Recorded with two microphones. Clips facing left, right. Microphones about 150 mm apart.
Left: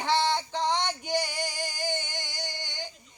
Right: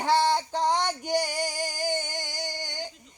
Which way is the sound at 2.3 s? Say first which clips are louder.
Right 4 dB; 40° right (ahead or behind).